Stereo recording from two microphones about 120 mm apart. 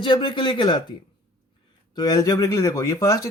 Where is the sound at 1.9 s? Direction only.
35° left (ahead or behind).